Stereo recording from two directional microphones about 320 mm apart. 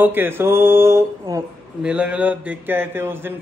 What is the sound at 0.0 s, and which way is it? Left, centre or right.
Speech, centre.